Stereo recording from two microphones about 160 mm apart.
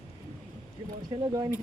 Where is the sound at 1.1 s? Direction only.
25° right (ahead or behind).